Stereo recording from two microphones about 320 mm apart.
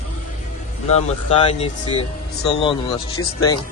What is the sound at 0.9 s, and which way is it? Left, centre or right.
Speech, centre.